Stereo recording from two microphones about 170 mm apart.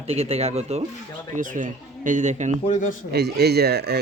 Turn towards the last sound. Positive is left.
turn(degrees=-70)  # may be behind; listen again after turning